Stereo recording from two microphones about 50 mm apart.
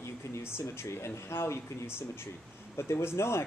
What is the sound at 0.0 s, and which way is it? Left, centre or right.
Speech, left.